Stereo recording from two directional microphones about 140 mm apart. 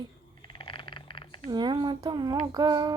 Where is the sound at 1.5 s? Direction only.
35° right (ahead or behind).